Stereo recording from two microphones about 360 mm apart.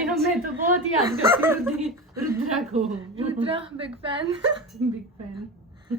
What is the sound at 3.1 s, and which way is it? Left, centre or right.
A woman's voice, centre.